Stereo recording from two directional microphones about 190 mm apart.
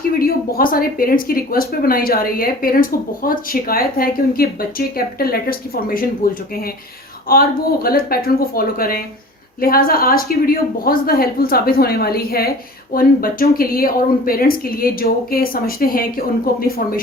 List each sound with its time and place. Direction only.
0.1 s speech: 50° left (ahead or behind)